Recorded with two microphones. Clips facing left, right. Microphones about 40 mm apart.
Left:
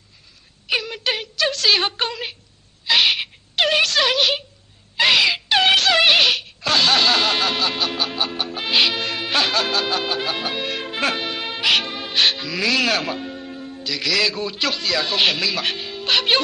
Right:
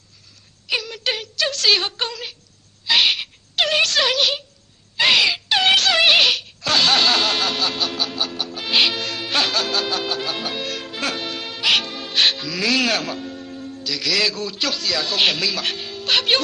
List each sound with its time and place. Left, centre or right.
0.7 s a sound: centre
1.8 s a man's voice: left
2.9 s owl: centre
3.5 s a sound: centre
4.9 s wail: centre; by 8.6 s left
8.9 s music: centre
12.4 s speech: centre
13.0 s music: centre
14.3 s a man's voice: left
15.1 s a man's voice: centre